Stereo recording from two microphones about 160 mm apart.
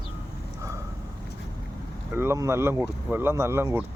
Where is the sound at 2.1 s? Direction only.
15° right (ahead or behind).